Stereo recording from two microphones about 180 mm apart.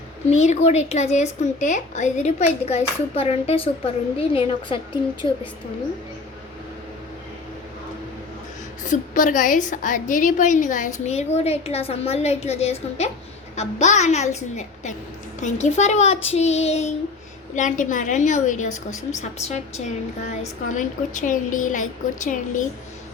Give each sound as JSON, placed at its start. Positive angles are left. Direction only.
{"t": 0.3, "sound": "a woman's voice", "side_deg": 40}
{"t": 8.9, "sound": "a woman's voice", "side_deg": 45}